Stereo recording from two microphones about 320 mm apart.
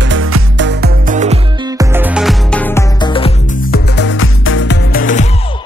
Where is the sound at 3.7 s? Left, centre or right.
Left.